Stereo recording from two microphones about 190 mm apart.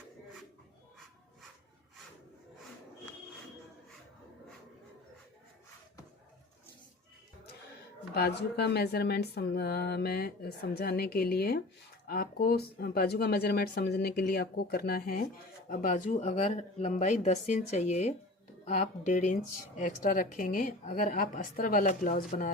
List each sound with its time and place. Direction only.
8.1 s speech: 60° left (ahead or behind)